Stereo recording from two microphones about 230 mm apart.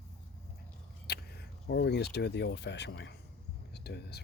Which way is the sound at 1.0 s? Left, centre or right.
Left.